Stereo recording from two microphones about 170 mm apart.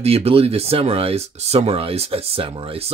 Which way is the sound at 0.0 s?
35° right (ahead or behind).